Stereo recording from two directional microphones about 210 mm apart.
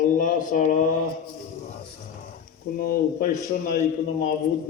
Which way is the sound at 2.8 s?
45° left (ahead or behind).